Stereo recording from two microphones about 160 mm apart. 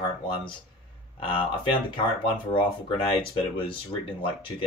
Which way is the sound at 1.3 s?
35° left (ahead or behind).